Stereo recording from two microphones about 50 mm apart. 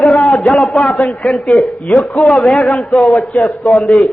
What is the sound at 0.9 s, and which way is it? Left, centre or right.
A man's voice, left.